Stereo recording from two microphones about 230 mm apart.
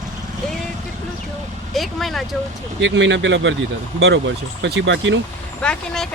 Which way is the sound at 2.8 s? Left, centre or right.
Right.